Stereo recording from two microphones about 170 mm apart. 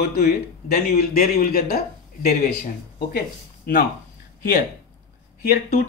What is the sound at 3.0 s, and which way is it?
Speech, 65° left (ahead or behind).